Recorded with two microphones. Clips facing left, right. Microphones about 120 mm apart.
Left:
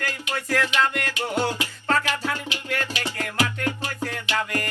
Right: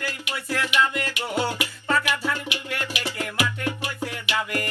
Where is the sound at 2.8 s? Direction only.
15° right (ahead or behind).